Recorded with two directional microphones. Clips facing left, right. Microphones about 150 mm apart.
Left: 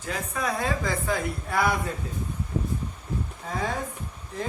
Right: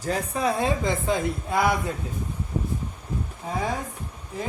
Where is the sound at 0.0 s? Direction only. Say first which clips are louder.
Right 5 dB; 30° right (ahead or behind).